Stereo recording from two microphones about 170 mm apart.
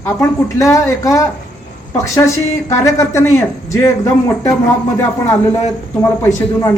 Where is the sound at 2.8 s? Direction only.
15° left (ahead or behind).